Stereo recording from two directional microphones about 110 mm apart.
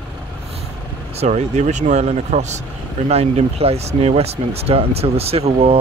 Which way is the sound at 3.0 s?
75° right (ahead or behind).